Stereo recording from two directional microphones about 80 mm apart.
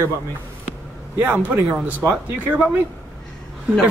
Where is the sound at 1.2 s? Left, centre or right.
Right.